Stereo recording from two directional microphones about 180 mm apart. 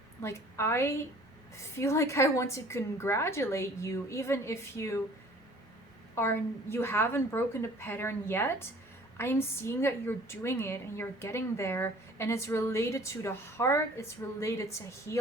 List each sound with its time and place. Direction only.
0.2 s a woman's voice: 15° left (ahead or behind)
6.1 s a woman's voice: 15° left (ahead or behind)